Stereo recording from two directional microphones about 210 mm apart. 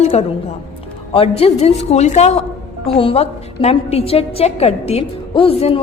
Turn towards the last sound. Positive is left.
turn(degrees=30)  # may be behind; listen again after turning